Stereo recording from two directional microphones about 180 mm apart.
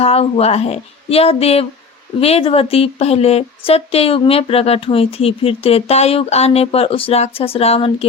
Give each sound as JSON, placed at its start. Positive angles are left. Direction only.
{"t": 0.0, "sound": "a woman's voice", "side_deg": 35}